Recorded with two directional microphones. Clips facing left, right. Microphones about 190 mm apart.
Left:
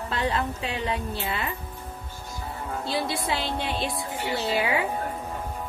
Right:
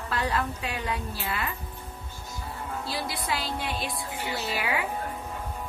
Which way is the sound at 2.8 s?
25° left (ahead or behind).